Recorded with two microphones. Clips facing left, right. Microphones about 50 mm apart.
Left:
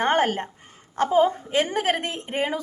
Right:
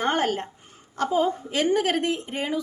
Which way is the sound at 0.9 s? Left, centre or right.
Left.